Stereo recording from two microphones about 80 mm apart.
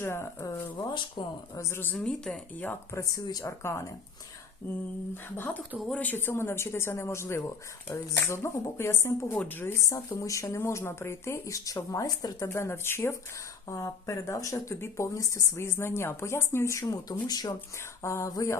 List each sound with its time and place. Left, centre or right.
0.0 s speech: left
1.2 s speech: left
1.5 s speech: left
2.0 s speech: centre
2.9 s speech: left
3.2 s speech: left
3.6 s speech: left
5.9 s speech: left
9.8 s speech: left
12.5 s speech: left
16.9 s speech: left
18.0 s speech: left